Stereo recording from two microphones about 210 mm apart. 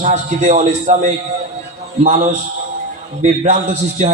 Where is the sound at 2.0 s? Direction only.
35° right (ahead or behind).